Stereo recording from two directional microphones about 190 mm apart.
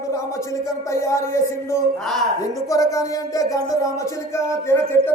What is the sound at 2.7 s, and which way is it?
Speech, 20° left (ahead or behind).